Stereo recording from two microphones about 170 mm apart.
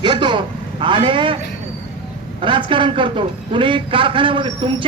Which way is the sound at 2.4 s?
30° right (ahead or behind).